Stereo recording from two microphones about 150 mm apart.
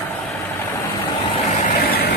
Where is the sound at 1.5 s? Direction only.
70° left (ahead or behind); by 2.2 s 90° left.